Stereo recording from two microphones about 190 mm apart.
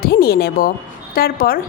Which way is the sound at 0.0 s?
55° left (ahead or behind).